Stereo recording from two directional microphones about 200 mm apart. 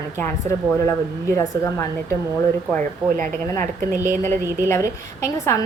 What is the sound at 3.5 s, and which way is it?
A woman's voice, 15° left (ahead or behind).